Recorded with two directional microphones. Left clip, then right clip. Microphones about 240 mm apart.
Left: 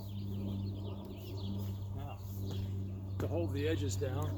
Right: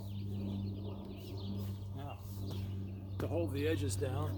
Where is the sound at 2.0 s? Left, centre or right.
Centre.